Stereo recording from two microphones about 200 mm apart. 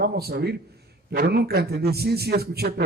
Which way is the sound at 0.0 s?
50° right (ahead or behind).